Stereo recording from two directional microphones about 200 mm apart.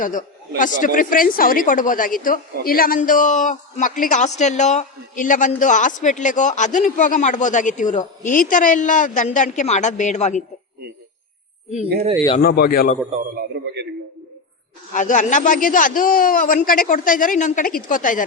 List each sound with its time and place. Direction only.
0.0 s a woman's voice: 40° left (ahead or behind)
12.4 s a man's voice: 50° left (ahead or behind)
13.1 s a man's voice: 35° right (ahead or behind)
14.9 s a woman's voice: 40° left (ahead or behind)